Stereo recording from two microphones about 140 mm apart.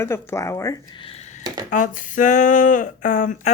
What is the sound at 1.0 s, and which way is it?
Speech, 45° left (ahead or behind).